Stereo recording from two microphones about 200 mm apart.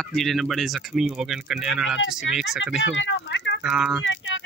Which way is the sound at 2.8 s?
65° left (ahead or behind).